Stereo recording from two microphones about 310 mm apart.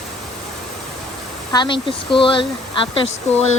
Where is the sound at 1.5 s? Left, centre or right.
Centre.